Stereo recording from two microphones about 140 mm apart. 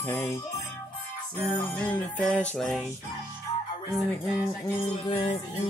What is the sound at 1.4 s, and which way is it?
Music, 10° left (ahead or behind).